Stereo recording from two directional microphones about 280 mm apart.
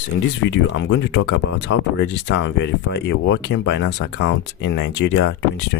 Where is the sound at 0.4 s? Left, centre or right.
Left.